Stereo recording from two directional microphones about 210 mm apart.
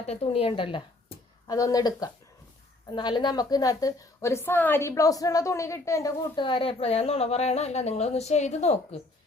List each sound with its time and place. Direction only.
0.1 s a woman's voice: 30° left (ahead or behind)